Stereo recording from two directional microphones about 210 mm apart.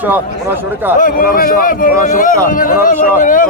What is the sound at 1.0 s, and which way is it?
A man's voice, 40° left (ahead or behind).